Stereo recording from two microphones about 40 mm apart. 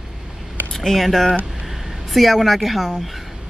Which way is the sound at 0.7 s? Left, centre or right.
Centre.